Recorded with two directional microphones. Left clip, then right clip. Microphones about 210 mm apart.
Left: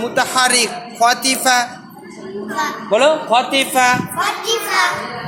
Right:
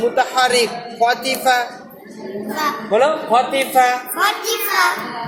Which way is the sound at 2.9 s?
50° left (ahead or behind).